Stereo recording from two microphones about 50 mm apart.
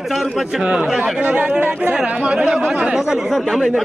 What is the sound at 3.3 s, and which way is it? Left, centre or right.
Speech, centre.